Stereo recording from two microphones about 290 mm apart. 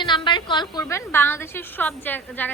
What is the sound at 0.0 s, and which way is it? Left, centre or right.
A woman's voice, centre.